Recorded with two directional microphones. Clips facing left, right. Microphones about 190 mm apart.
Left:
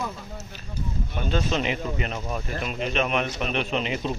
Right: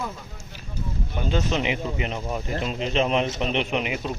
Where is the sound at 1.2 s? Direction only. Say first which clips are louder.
Right 1 dB; 15° right (ahead or behind).